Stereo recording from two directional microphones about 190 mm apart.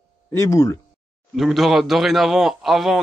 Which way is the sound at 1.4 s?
Centre (ahead or behind).